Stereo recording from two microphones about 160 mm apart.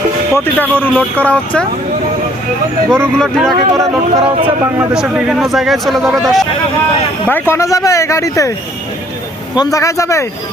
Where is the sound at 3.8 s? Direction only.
25° right (ahead or behind).